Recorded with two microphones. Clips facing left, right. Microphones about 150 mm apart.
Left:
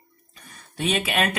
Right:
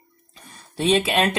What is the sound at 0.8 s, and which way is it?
Speech, 30° right (ahead or behind).